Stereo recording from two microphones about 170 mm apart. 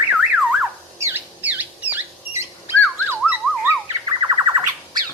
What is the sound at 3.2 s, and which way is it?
Emergency vehicle, 10° right (ahead or behind).